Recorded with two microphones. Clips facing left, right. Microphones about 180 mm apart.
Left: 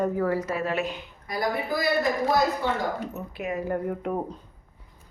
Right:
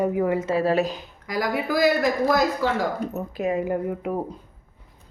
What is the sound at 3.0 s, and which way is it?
Speech, 40° right (ahead or behind).